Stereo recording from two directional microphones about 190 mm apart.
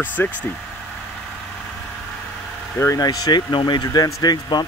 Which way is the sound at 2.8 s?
20° left (ahead or behind).